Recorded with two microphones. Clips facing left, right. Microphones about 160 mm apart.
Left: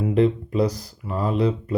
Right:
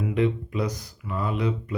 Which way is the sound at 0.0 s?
35° left (ahead or behind).